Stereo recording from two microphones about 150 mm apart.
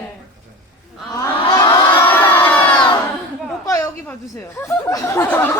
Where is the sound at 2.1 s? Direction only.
10° left (ahead or behind).